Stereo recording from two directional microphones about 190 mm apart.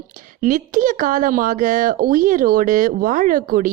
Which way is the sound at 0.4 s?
45° right (ahead or behind).